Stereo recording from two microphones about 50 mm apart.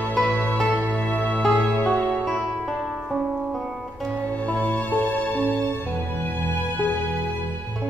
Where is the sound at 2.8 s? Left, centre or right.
Centre.